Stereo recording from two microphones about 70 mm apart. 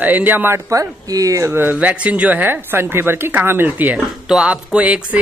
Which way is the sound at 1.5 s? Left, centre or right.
Right.